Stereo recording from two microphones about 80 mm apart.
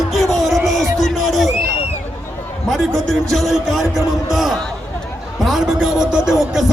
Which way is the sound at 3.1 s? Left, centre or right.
Centre.